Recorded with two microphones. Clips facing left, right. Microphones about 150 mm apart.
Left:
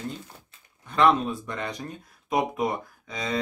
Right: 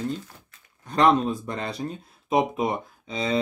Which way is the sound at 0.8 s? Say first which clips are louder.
Right 1 dB; 40° right (ahead or behind).